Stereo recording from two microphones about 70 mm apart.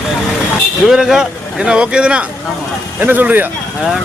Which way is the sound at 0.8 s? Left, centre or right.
Centre.